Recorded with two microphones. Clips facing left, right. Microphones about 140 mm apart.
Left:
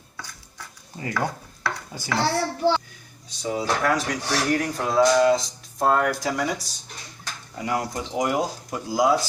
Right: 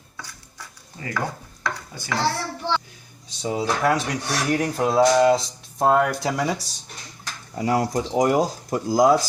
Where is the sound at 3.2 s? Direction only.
25° right (ahead or behind).